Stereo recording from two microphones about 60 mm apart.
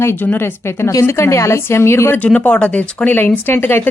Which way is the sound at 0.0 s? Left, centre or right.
Left.